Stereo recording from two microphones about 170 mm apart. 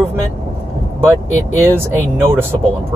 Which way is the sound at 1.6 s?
15° right (ahead or behind).